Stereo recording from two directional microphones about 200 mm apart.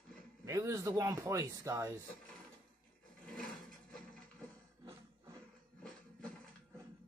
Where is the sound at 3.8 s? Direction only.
5° left (ahead or behind).